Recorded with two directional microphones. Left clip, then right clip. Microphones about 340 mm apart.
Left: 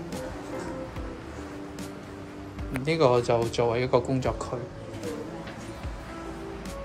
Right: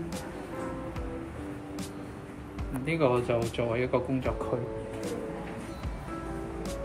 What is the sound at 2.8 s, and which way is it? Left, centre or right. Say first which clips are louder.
Speech: left 5 dB; centre.